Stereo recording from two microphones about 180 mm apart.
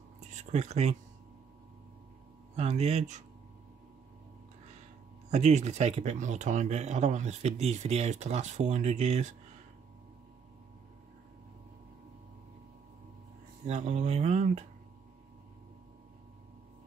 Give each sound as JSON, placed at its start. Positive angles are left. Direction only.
{"t": 0.4, "sound": "speech", "side_deg": -40}
{"t": 2.5, "sound": "speech", "side_deg": -35}
{"t": 5.3, "sound": "speech", "side_deg": -40}
{"t": 13.7, "sound": "speech", "side_deg": -40}